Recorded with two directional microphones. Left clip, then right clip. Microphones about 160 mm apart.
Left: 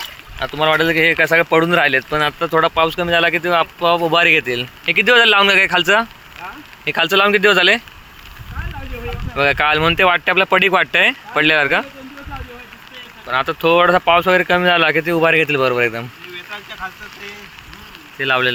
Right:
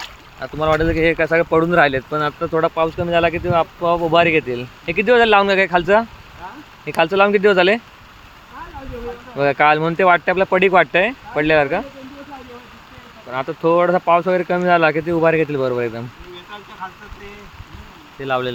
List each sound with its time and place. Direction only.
0.6 s speech: 5° right (ahead or behind)
9.4 s speech: 20° right (ahead or behind)
13.2 s speech: 15° right (ahead or behind)
18.2 s speech: centre (ahead or behind)